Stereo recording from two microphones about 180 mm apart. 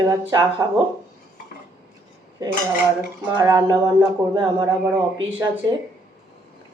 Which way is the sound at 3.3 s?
20° right (ahead or behind).